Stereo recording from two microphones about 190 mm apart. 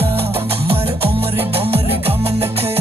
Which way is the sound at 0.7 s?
30° right (ahead or behind).